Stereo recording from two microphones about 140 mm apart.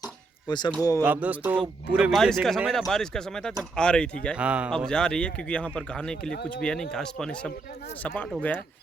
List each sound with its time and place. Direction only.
0.4 s speech: 30° left (ahead or behind)
1.0 s a man's voice: 10° right (ahead or behind)
2.0 s speech: centre (ahead or behind)
4.4 s a man's voice: 10° right (ahead or behind)
4.7 s speech: 5° left (ahead or behind)